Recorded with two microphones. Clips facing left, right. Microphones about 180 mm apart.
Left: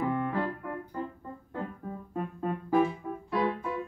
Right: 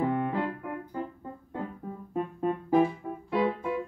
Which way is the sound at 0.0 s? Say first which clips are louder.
Right 2 dB; 20° right (ahead or behind).